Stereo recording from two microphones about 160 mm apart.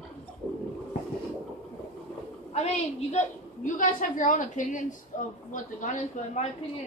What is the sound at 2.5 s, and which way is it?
Speech, 45° left (ahead or behind).